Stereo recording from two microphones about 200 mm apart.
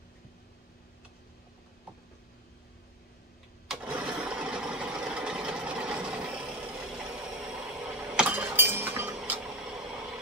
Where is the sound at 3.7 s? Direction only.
5° right (ahead or behind).